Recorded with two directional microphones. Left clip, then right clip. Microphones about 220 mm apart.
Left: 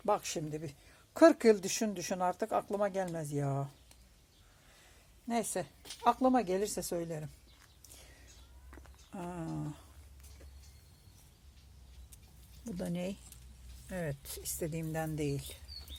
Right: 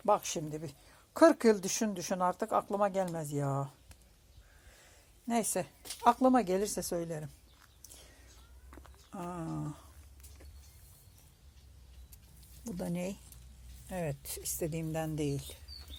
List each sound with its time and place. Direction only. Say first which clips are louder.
0.0 s speech: right 3 dB; 5° right (ahead or behind)
5.3 s speech: right 2 dB; 15° right (ahead or behind)
8.7 s a sound: right 1 dB; 5° right (ahead or behind)
12.6 s speech: right 1 dB; 10° right (ahead or behind)